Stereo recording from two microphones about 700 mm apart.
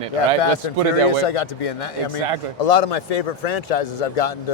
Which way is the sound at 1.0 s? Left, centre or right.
Left.